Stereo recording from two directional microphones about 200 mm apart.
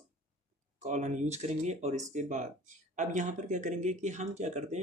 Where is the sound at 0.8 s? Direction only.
35° right (ahead or behind).